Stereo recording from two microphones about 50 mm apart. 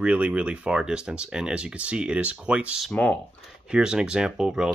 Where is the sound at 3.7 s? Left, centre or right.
Centre.